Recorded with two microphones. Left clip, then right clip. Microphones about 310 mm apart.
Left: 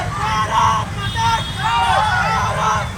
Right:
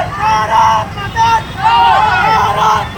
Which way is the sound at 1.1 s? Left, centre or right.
Centre.